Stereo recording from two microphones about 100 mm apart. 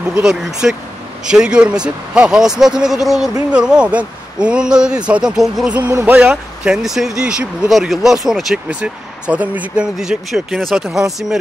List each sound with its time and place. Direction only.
0.2 s a man's voice: 5° right (ahead or behind)
5.9 s speech: 25° right (ahead or behind)
6.1 s speech: 10° right (ahead or behind)